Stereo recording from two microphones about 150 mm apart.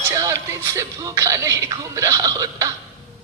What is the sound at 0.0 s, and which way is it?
Speech, 20° right (ahead or behind).